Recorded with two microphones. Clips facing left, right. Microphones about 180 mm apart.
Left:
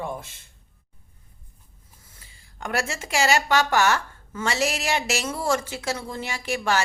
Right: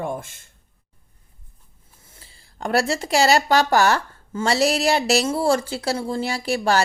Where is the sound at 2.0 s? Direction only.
25° right (ahead or behind).